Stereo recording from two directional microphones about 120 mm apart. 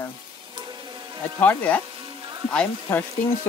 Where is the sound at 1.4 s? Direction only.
15° left (ahead or behind).